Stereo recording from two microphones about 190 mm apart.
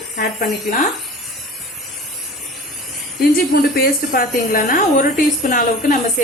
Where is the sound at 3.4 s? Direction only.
55° left (ahead or behind).